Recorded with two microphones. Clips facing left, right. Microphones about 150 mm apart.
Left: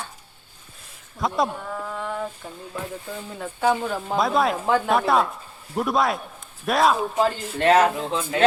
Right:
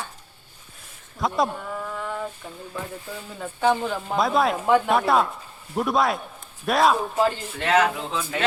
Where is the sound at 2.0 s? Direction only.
5° left (ahead or behind).